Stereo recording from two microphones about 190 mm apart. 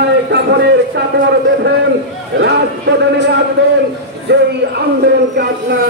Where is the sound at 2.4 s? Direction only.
65° right (ahead or behind).